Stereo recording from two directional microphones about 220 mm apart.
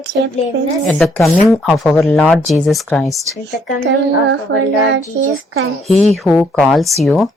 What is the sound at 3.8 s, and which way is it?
Child singing, 55° right (ahead or behind).